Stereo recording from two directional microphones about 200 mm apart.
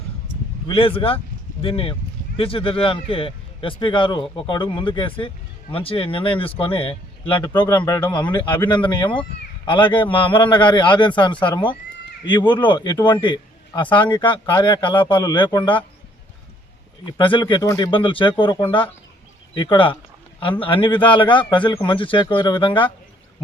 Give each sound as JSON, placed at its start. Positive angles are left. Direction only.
{"t": 0.7, "sound": "speech", "side_deg": 25}
{"t": 17.1, "sound": "speech", "side_deg": 25}